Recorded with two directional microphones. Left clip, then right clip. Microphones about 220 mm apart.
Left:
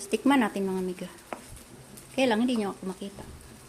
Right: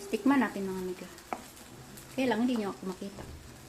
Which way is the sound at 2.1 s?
35° left (ahead or behind).